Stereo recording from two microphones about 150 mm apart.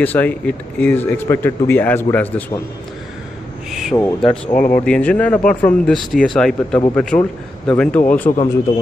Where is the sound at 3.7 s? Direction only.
Centre (ahead or behind).